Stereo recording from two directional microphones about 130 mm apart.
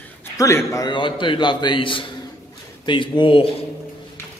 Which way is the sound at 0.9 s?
40° left (ahead or behind).